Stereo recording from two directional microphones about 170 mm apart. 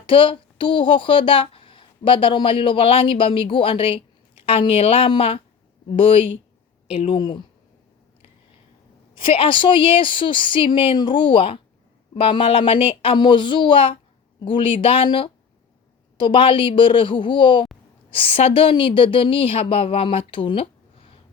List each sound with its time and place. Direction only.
0.0 s a woman's voice: 30° left (ahead or behind)
9.2 s a woman's voice: 30° left (ahead or behind)